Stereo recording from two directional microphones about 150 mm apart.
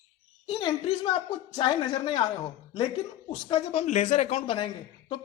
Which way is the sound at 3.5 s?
40° left (ahead or behind).